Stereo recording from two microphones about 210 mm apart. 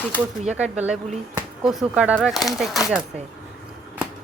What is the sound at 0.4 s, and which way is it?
Speech, 5° right (ahead or behind).